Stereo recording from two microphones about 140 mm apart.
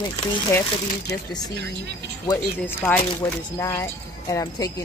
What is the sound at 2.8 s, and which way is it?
A woman's voice, 10° left (ahead or behind).